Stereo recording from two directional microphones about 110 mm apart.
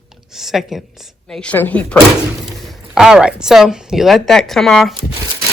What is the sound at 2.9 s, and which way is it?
Speech, 5° right (ahead or behind).